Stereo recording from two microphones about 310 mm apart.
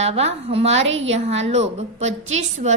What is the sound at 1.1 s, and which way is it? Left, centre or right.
A woman's voice, right.